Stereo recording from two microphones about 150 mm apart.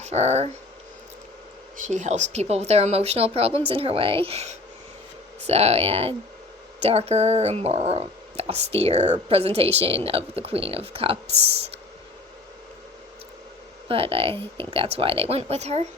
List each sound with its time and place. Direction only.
0.0 s speech: 45° right (ahead or behind)
1.9 s speech: 50° right (ahead or behind)
13.8 s speech: 40° right (ahead or behind)